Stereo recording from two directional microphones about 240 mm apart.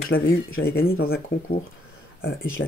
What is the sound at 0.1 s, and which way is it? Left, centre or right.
Speech, left.